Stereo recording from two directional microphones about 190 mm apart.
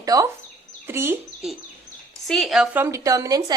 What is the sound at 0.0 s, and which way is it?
A woman's voice, 20° right (ahead or behind).